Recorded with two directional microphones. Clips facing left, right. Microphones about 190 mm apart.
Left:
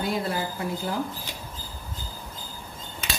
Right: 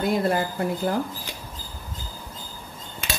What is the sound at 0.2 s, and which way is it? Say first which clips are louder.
Speech: right 5 dB; 55° right (ahead or behind).